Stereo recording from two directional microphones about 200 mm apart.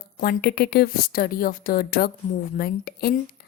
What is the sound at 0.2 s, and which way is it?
Speech, 50° left (ahead or behind).